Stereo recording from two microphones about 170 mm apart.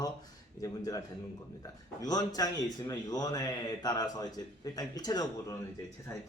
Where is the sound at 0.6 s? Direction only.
20° left (ahead or behind).